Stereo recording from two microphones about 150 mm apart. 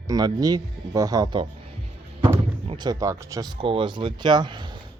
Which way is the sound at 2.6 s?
30° right (ahead or behind).